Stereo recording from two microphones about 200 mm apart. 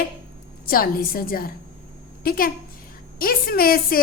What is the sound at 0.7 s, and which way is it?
A child's voice, 45° left (ahead or behind).